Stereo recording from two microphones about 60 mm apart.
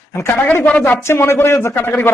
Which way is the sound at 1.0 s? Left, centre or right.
Left.